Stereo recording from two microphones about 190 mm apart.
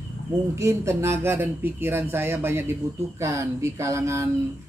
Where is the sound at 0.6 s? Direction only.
15° right (ahead or behind).